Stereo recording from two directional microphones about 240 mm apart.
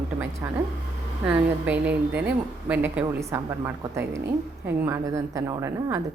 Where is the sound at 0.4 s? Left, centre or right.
Centre.